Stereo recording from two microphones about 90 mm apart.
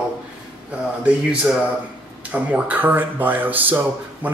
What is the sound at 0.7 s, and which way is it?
Speech, 10° right (ahead or behind).